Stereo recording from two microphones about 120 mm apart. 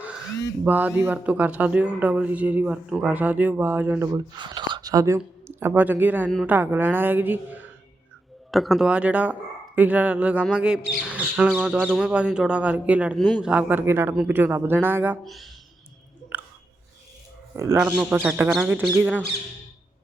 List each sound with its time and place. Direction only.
0.6 s speech: 15° right (ahead or behind)
4.1 s speech: 40° right (ahead or behind); by 7.7 s 15° right (ahead or behind)
8.4 s speech: centre (ahead or behind)
13.1 s speech: centre (ahead or behind); by 15.2 s 15° right (ahead or behind)
15.2 s speech: centre (ahead or behind)
16.3 s a sound: 15° right (ahead or behind)
17.5 s speech: 20° right (ahead or behind)
17.7 s speech: 10° right (ahead or behind)
18.4 s speech: centre (ahead or behind)
18.7 s speech: 15° right (ahead or behind)